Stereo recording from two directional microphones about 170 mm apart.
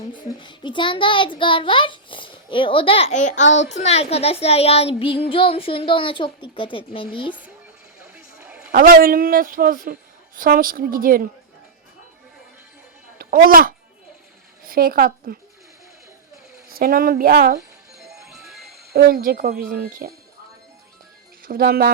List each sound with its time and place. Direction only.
0.1 s a child's voice: 25° left (ahead or behind)
8.0 s music: 5° right (ahead or behind)
8.7 s a woman's voice: 60° right (ahead or behind)
13.1 s a sound: 60° right (ahead or behind)
14.7 s a woman's voice: 60° right (ahead or behind)
16.6 s a woman's voice: 60° right (ahead or behind)
18.3 s music: centre (ahead or behind)
18.9 s a woman's voice: 60° right (ahead or behind)
21.4 s a woman's voice: 60° right (ahead or behind)